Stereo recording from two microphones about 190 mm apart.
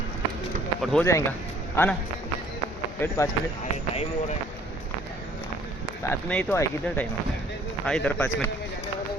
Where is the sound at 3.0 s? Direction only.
15° left (ahead or behind).